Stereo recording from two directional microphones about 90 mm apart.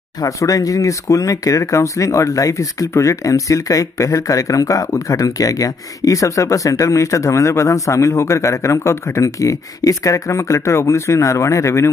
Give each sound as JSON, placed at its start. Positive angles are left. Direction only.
{"t": 0.2, "sound": "speech", "side_deg": 40}